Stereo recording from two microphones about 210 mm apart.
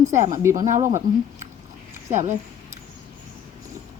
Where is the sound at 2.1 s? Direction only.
35° right (ahead or behind).